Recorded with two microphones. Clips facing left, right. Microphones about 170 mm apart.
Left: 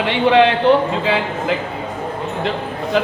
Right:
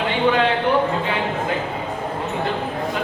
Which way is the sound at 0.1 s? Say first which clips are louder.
Left 6 dB; 85° left.